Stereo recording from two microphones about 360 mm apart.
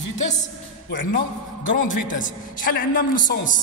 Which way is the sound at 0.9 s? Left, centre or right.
Left.